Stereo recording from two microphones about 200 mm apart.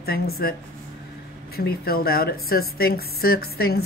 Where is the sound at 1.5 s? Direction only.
50° left (ahead or behind).